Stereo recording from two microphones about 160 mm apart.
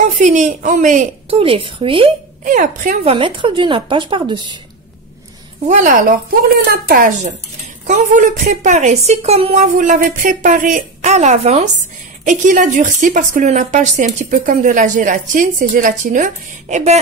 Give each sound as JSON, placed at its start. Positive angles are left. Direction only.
{"t": 0.0, "sound": "a woman's voice", "side_deg": -50}
{"t": 1.3, "sound": "a woman's voice", "side_deg": -35}
{"t": 2.4, "sound": "speech", "side_deg": -55}
{"t": 3.0, "sound": "a woman's voice", "side_deg": -35}
{"t": 5.7, "sound": "a woman's voice", "side_deg": -55}